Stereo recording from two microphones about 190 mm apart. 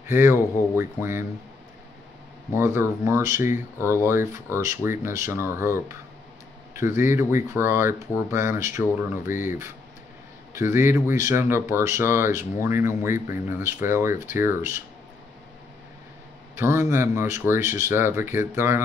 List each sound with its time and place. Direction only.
0.0 s speech: 15° right (ahead or behind)
2.5 s speech: 15° right (ahead or behind)
7.0 s speech: 15° right (ahead or behind)
9.2 s speech: 45° left (ahead or behind)
10.5 s speech: 15° right (ahead or behind)
16.5 s speech: 15° right (ahead or behind)